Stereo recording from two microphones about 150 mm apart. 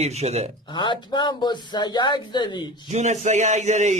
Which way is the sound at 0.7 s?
30° left (ahead or behind).